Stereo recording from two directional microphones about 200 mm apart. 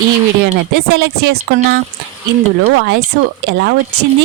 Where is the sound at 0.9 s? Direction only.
55° right (ahead or behind).